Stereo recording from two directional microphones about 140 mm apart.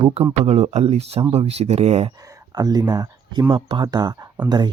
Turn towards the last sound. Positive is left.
turn(degrees=-30)  # may be behind; listen again after turning